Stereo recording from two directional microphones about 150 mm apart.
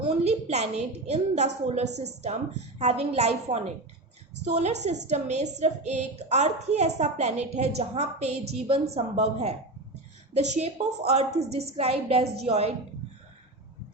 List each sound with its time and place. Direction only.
0.3 s a woman's voice: 45° right (ahead or behind)